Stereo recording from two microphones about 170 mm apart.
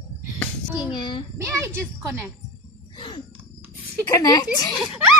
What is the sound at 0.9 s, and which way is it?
Speech, 25° left (ahead or behind).